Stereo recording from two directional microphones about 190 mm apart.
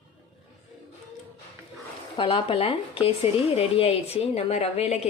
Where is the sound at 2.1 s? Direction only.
25° left (ahead or behind).